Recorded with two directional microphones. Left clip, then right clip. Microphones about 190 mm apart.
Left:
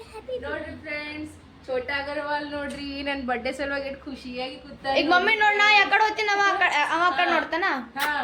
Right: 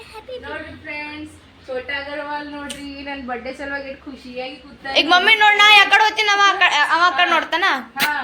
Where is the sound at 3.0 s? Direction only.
30° left (ahead or behind).